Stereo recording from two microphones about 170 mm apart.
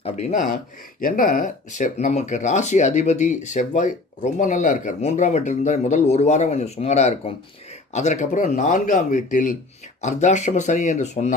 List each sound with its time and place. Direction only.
0.0 s speech: 45° left (ahead or behind)